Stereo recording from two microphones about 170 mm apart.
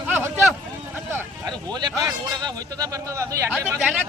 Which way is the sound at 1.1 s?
25° right (ahead or behind).